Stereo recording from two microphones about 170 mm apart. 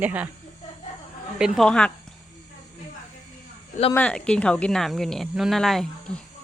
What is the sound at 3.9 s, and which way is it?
Speech, 5° left (ahead or behind).